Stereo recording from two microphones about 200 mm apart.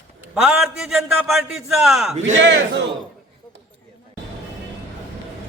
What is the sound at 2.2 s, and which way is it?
Speech, 65° right (ahead or behind).